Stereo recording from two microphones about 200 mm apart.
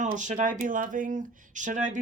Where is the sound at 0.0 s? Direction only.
40° right (ahead or behind).